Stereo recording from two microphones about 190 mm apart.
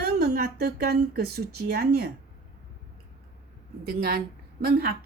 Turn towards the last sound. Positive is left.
turn(degrees=-55)  # may be behind; listen again after turning